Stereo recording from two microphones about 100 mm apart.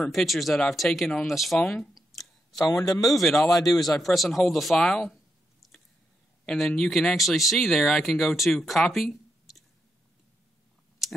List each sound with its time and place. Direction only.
0.0 s speech: centre (ahead or behind)
2.6 s a man's voice: 40° left (ahead or behind)
3.0 s speech: centre (ahead or behind)
5.6 s a sound: centre (ahead or behind)
6.4 s speech: 5° left (ahead or behind)
8.9 s a sound: centre (ahead or behind)